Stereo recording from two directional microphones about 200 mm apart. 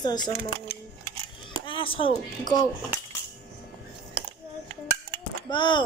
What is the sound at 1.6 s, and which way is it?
Speech, 25° left (ahead or behind).